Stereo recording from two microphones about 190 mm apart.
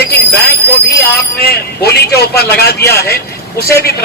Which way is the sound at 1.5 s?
55° left (ahead or behind).